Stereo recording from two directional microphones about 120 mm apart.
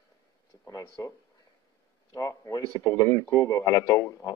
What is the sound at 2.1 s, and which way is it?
Speech, 30° left (ahead or behind).